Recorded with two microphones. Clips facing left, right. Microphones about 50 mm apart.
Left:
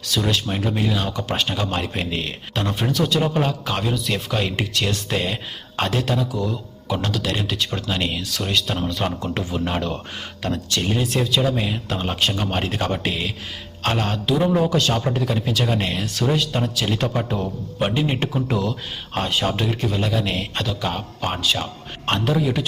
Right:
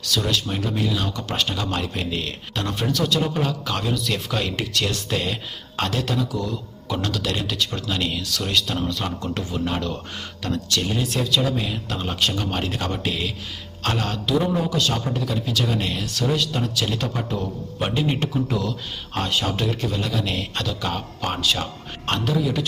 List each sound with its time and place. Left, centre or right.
0.1 s speech: centre
3.8 s speech: centre
14.5 s speech: left
17.7 s speech: centre
18.0 s speech: left
19.1 s speech: centre
22.0 s speech: left